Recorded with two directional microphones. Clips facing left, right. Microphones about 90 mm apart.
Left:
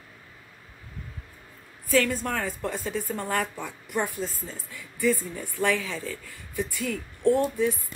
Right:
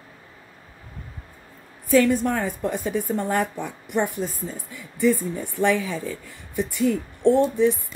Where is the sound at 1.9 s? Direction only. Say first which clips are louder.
Right 6 dB; 20° right (ahead or behind).